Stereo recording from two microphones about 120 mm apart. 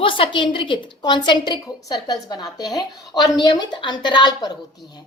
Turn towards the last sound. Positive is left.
turn(degrees=35)  # may be behind; listen again after turning